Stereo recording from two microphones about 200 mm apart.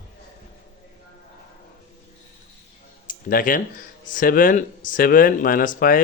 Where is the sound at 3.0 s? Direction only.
45° left (ahead or behind).